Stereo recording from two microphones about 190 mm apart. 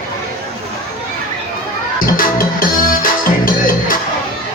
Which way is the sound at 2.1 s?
50° left (ahead or behind).